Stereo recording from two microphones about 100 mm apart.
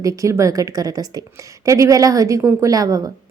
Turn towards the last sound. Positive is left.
turn(degrees=-35)  # may be behind; listen again after turning